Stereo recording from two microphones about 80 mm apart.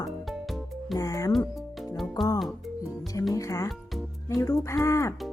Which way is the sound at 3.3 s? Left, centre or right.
Left.